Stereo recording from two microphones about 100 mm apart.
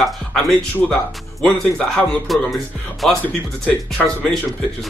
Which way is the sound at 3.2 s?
15° left (ahead or behind).